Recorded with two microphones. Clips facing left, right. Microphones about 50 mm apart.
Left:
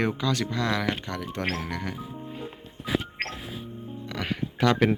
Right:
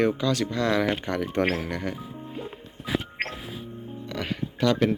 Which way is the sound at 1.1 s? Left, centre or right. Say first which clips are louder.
Right 6 dB; right.